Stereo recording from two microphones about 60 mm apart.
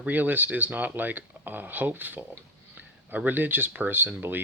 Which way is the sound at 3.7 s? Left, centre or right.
Right.